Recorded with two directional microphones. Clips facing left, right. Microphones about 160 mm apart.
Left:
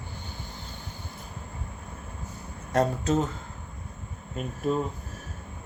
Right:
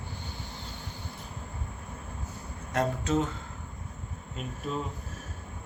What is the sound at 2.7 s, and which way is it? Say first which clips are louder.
Speech: left 3 dB; 40° left (ahead or behind).